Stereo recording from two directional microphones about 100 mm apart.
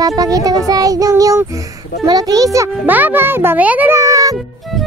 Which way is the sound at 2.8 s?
20° right (ahead or behind).